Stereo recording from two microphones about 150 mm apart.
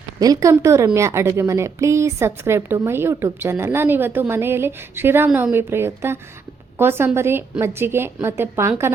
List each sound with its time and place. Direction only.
0.2 s a woman's voice: 25° right (ahead or behind)